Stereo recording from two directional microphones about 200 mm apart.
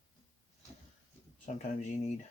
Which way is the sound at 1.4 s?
35° left (ahead or behind).